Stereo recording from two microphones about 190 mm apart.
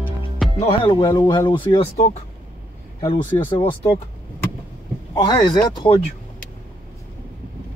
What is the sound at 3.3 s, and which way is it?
Speech, 25° left (ahead or behind).